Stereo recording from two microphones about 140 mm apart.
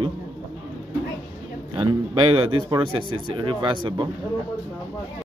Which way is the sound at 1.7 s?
35° right (ahead or behind).